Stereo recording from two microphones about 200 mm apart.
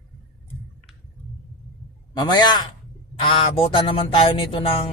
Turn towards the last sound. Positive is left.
turn(degrees=25)  # may be behind; listen again after turning